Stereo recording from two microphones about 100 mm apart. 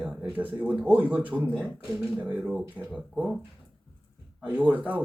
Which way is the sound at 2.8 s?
15° right (ahead or behind).